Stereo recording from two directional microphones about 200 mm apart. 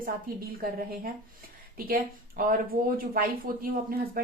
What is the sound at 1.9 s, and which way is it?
Speech, 45° right (ahead or behind).